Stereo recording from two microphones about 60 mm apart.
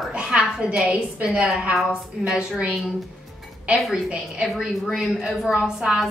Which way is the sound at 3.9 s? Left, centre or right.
Centre.